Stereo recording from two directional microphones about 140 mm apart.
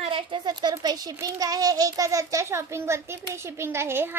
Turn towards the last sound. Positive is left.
turn(degrees=-15)  # may be behind; listen again after turning